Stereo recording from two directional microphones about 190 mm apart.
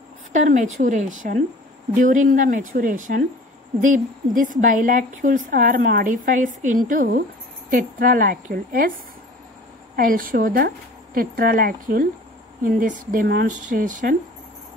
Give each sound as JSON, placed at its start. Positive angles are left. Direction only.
{"t": 0.3, "sound": "a woman's voice", "side_deg": -40}
{"t": 9.9, "sound": "a woman's voice", "side_deg": -50}